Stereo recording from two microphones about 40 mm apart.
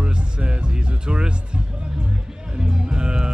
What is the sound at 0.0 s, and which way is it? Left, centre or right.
Music, right.